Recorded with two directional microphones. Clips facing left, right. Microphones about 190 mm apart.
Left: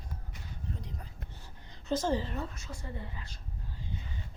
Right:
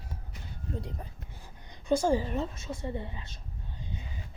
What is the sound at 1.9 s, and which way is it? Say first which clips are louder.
A woman's voice: right 5 dB; 10° right (ahead or behind).